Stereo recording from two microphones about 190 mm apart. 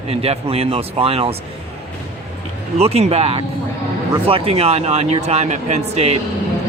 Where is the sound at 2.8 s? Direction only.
30° right (ahead or behind).